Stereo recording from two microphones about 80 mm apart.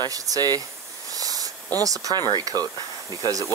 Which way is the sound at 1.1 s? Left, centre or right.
Right.